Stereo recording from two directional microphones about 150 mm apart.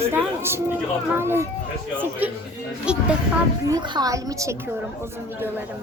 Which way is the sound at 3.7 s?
25° right (ahead or behind).